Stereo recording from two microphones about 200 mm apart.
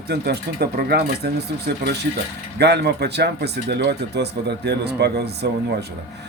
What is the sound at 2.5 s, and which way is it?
Speech, 55° right (ahead or behind).